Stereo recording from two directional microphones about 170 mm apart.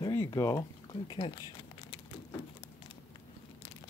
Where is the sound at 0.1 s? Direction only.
15° left (ahead or behind).